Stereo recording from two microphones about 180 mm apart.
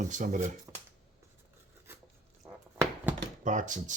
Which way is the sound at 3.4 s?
45° right (ahead or behind).